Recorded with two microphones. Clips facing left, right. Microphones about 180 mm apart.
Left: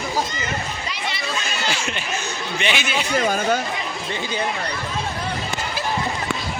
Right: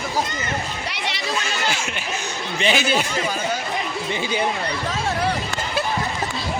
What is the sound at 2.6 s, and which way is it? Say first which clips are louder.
Speech: right 4 dB; 35° right (ahead or behind).